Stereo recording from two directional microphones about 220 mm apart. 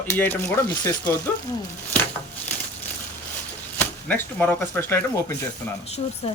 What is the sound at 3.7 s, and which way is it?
Speech, 5° left (ahead or behind).